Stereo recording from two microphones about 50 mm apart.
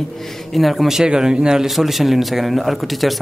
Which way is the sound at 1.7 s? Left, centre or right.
Centre.